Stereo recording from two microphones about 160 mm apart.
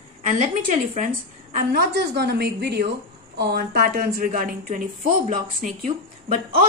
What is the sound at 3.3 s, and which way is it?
A woman's voice, 75° right (ahead or behind).